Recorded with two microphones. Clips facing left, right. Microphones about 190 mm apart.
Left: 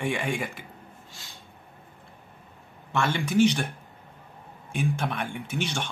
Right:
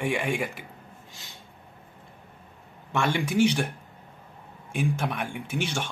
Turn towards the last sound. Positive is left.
turn(degrees=-10)  # may be behind; listen again after turning